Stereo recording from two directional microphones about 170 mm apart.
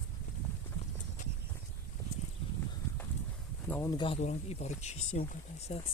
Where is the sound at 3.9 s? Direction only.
30° left (ahead or behind).